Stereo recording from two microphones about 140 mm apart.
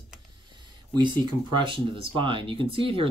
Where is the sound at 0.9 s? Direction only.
35° right (ahead or behind).